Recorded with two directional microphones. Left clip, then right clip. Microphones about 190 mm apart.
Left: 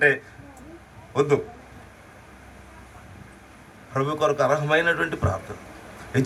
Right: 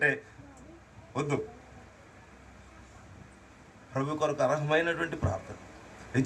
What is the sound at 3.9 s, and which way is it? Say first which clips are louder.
A man's voice: left 8 dB; 35° left (ahead or behind).